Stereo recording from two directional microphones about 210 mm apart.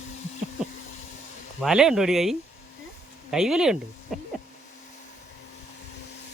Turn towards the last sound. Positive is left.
turn(degrees=0)  # may be behind; listen again after turning